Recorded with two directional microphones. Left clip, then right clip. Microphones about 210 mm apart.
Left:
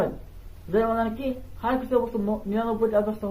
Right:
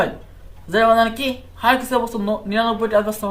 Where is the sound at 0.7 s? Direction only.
10° right (ahead or behind).